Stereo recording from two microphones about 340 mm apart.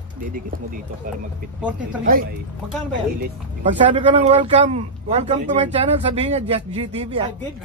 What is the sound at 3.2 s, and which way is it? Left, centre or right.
Speech, right.